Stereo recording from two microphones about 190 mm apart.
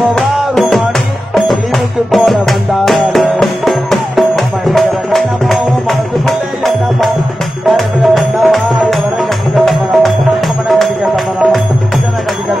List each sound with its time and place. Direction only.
0.1 s music: centre (ahead or behind)
2.0 s music: centre (ahead or behind)